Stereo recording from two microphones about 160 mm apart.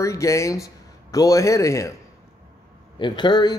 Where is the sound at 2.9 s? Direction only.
30° left (ahead or behind).